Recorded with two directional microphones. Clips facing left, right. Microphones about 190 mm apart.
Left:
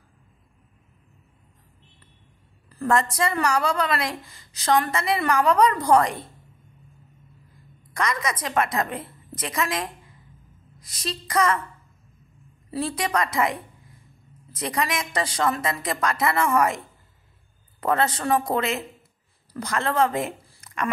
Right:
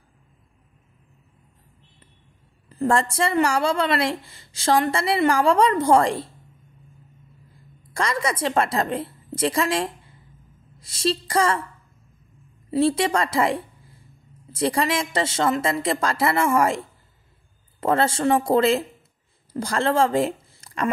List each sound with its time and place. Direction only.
2.7 s a woman's voice: 25° right (ahead or behind)
7.9 s a woman's voice: 30° right (ahead or behind)
12.7 s a woman's voice: 25° right (ahead or behind)